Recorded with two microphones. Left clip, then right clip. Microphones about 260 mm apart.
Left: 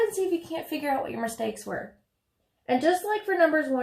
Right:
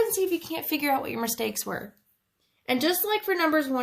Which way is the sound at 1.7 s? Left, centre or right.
Right.